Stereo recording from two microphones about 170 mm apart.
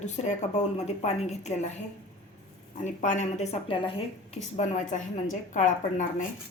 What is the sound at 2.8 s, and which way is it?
A woman's voice, 45° left (ahead or behind).